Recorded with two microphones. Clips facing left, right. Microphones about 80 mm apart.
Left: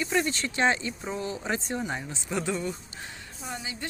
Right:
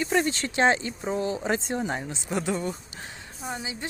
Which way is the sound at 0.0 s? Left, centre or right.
Right.